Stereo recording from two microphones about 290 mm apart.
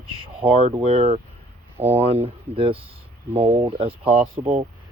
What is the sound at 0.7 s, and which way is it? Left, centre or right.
Speech, centre.